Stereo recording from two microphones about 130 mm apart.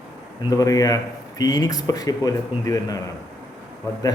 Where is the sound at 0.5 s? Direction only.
25° left (ahead or behind).